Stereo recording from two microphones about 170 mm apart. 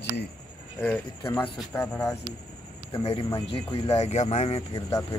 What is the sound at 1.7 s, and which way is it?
Speech, 15° left (ahead or behind).